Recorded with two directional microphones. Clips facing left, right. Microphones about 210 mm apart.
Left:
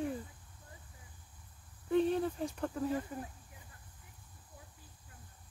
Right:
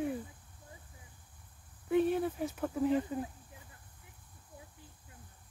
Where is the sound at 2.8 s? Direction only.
20° right (ahead or behind).